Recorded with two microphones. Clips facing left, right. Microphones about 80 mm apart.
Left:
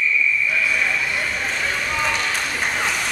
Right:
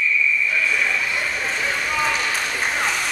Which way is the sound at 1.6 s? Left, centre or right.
Centre.